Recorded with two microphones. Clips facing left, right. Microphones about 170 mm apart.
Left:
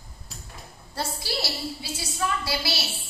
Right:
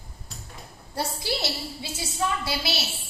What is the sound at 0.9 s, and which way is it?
A woman's voice, 20° right (ahead or behind).